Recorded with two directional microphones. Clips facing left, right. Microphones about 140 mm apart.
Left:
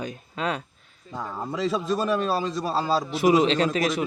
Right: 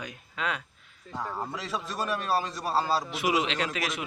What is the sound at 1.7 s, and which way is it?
Speech, 25° left (ahead or behind).